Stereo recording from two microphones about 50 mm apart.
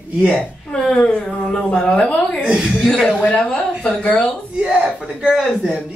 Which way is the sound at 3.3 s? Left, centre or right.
Centre.